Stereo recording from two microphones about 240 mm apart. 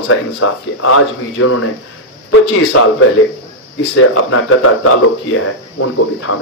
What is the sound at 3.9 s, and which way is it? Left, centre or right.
Speech, left.